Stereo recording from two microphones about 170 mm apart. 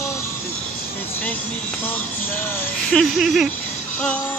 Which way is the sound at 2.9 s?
Centre (ahead or behind).